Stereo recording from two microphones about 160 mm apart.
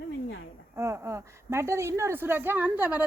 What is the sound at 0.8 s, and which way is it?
A woman's voice, 20° right (ahead or behind).